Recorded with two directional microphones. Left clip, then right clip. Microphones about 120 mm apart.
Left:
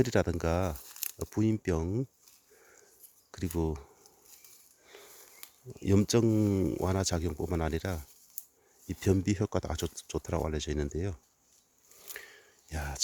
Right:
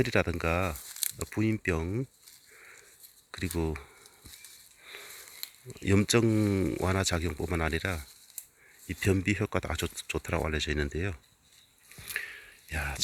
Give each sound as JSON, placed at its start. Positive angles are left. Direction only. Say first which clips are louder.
{"t": 0.0, "sound": "speech", "louder": "right 1 dB", "side_deg": 40}
{"t": 0.8, "sound": "crumpling", "louder": "right 4 dB", "side_deg": 10}
{"t": 1.3, "sound": "speech", "louder": "even", "side_deg": 40}
{"t": 2.6, "sound": "a sound", "louder": "right 8 dB", "side_deg": 35}
{"t": 3.3, "sound": "speech", "louder": "right 1 dB", "side_deg": 30}
{"t": 5.8, "sound": "speech", "louder": "right 1 dB", "side_deg": 30}
{"t": 12.1, "sound": "a sound", "louder": "right 11 dB", "side_deg": 35}